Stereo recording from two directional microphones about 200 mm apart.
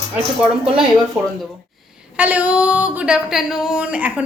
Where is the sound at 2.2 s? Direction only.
5° right (ahead or behind).